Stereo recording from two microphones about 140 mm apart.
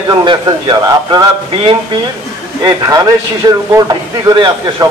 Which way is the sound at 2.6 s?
25° right (ahead or behind).